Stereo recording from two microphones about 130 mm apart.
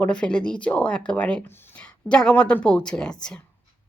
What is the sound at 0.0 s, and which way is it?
Speech, 10° left (ahead or behind).